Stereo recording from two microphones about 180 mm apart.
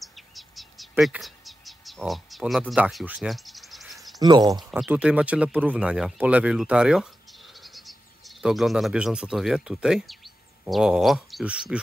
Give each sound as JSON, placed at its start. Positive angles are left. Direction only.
{"t": 0.0, "sound": "insect", "side_deg": 0}
{"t": 4.2, "sound": "speech", "side_deg": -20}
{"t": 4.6, "sound": "speech", "side_deg": -5}
{"t": 8.4, "sound": "speech", "side_deg": 0}